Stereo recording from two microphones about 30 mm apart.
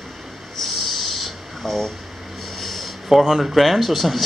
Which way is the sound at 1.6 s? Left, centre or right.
Centre.